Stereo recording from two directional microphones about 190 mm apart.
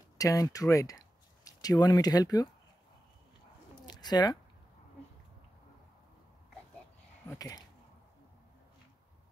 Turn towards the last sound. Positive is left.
turn(degrees=20)  # may be behind; listen again after turning